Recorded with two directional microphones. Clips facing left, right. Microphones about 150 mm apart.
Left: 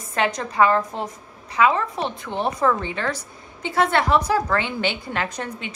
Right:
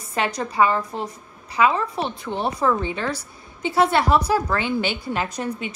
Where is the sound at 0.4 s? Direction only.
Centre (ahead or behind).